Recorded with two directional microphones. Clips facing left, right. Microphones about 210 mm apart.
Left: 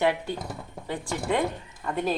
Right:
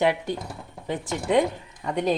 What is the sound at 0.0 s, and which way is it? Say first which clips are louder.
Speech: right 2 dB; 15° right (ahead or behind).